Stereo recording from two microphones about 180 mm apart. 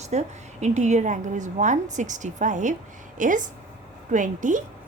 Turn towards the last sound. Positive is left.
turn(degrees=-45)  # may be behind; listen again after turning